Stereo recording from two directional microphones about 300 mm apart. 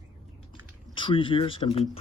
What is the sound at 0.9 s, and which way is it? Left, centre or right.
Speech, centre.